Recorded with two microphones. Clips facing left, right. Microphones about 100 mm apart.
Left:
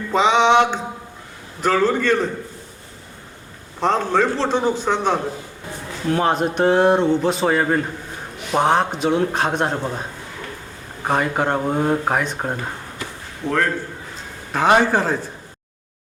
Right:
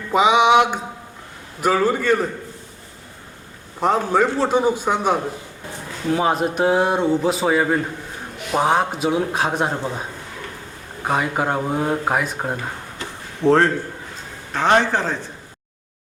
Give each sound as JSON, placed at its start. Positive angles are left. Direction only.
{"t": 0.1, "sound": "a man's voice", "side_deg": -10}
{"t": 3.8, "sound": "a man's voice", "side_deg": -10}
{"t": 13.4, "sound": "a man's voice", "side_deg": -30}
{"t": 14.5, "sound": "speech", "side_deg": 5}